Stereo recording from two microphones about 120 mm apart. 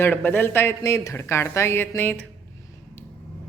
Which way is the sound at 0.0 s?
15° left (ahead or behind).